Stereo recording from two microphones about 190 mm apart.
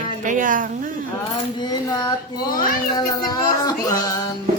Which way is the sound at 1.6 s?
20° left (ahead or behind).